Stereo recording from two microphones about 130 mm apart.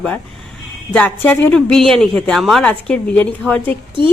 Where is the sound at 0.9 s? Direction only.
10° left (ahead or behind).